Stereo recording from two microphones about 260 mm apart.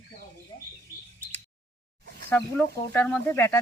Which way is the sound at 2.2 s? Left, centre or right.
Centre.